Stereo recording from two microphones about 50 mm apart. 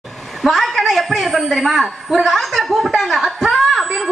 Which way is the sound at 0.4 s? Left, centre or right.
Centre.